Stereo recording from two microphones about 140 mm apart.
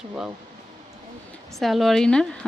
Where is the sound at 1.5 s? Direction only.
Centre (ahead or behind).